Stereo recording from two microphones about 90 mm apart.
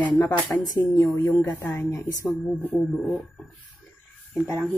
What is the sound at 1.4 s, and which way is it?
Speech, 20° left (ahead or behind).